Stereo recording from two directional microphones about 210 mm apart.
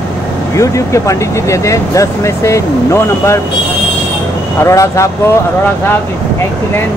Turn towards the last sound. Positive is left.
turn(degrees=15)  # may be behind; listen again after turning